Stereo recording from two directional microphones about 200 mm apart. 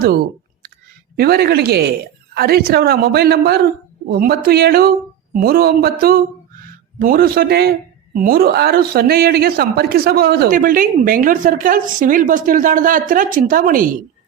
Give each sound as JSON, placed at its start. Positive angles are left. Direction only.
{"t": 1.1, "sound": "speech", "side_deg": -50}